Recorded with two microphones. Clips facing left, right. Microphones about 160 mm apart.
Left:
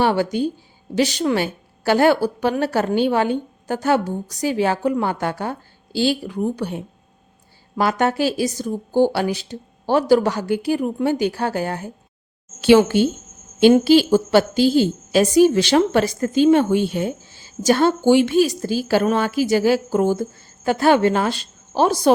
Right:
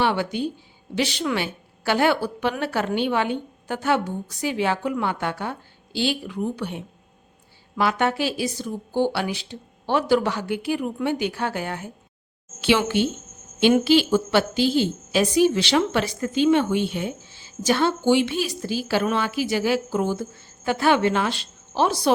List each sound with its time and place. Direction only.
0.0 s a woman's voice: 40° left (ahead or behind)